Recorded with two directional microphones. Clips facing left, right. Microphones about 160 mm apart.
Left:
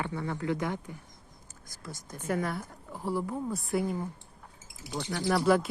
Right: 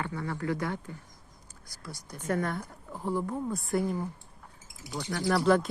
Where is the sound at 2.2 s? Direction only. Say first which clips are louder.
Right 1 dB; 5° left (ahead or behind).